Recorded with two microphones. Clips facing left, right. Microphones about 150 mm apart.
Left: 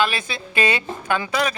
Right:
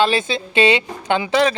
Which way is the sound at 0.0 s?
25° right (ahead or behind).